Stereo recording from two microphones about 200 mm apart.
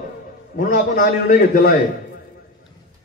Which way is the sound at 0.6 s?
45° left (ahead or behind).